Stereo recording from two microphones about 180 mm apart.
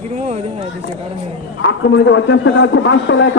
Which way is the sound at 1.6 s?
90° left.